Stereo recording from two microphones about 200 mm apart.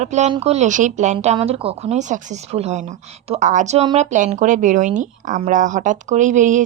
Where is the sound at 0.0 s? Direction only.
35° right (ahead or behind).